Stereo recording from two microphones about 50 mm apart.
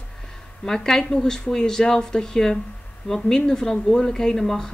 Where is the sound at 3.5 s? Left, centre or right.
Centre.